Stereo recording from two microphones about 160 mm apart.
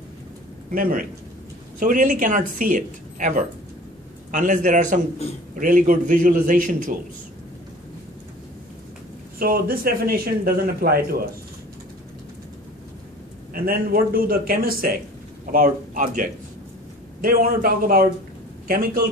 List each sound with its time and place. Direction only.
0.7 s a man's voice: 60° right (ahead or behind)
9.4 s speech: 65° right (ahead or behind)
13.5 s speech: 65° right (ahead or behind)